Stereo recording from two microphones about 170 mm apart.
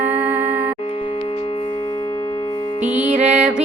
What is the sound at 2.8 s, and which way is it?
Music, 5° right (ahead or behind).